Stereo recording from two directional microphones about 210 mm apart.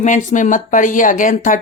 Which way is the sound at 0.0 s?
35° left (ahead or behind).